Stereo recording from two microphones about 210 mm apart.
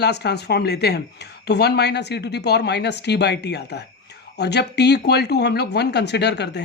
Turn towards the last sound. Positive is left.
turn(degrees=55)  # may be behind; listen again after turning